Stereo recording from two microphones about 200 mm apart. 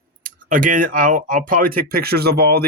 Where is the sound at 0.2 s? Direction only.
45° right (ahead or behind).